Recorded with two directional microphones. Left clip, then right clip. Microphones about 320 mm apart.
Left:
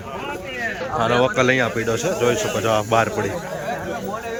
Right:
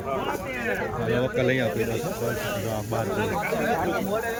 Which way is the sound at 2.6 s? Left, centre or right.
Left.